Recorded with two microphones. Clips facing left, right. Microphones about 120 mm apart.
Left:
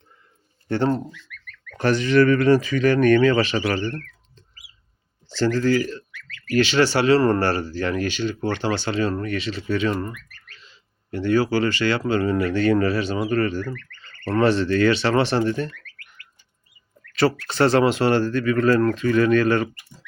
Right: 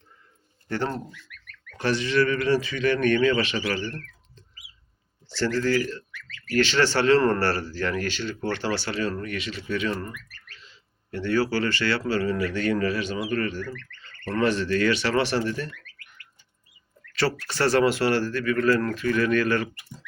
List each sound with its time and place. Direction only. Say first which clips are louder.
0.7 s speech: left 7 dB; 25° left (ahead or behind)
1.8 s speech: left 6 dB; 45° left (ahead or behind)
5.3 s speech: left 4 dB; 15° left (ahead or behind)
10.7 s speech: left 5 dB; 15° left (ahead or behind)
17.1 s speech: left 5 dB; 20° left (ahead or behind)